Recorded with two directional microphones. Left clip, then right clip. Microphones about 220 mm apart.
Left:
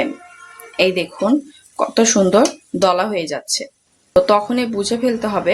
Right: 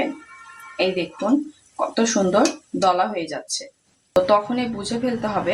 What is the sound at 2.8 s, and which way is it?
Speech, 50° left (ahead or behind).